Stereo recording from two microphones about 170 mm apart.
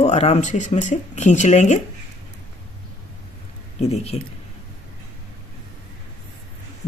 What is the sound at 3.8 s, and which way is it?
Speech, 40° left (ahead or behind).